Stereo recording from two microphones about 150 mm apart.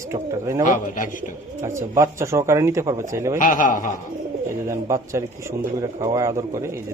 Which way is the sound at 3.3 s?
60° left (ahead or behind).